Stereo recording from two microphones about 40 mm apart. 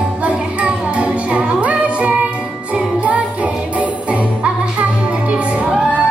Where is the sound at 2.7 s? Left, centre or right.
Right.